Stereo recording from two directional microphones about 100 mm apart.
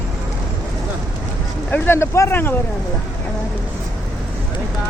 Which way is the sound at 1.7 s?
20° left (ahead or behind).